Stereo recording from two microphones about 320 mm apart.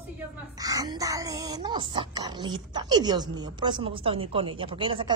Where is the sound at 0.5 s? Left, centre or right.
Centre.